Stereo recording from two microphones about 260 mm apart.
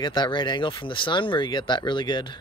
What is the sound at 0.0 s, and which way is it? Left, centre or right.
Speech, centre.